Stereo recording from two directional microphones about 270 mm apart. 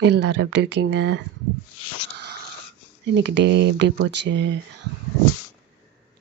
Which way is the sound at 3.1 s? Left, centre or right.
Right.